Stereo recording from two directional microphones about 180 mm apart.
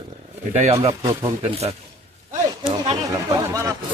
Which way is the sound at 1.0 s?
15° right (ahead or behind).